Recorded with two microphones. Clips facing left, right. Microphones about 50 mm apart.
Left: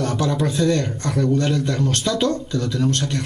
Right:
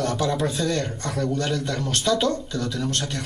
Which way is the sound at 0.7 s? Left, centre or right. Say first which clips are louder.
Left 4 dB; centre.